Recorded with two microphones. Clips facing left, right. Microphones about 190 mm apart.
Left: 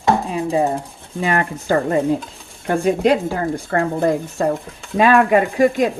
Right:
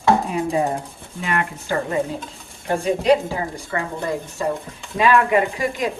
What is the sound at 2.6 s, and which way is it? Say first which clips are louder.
Speech: left 2 dB; 55° left (ahead or behind).